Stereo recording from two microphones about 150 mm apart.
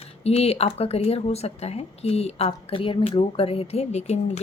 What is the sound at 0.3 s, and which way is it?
Speech, 45° left (ahead or behind).